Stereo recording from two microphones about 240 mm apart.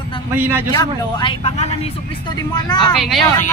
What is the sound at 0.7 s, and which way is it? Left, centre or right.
Speech, centre.